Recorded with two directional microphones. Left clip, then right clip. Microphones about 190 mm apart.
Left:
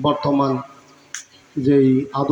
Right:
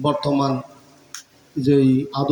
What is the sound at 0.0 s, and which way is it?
Speech, 25° left (ahead or behind).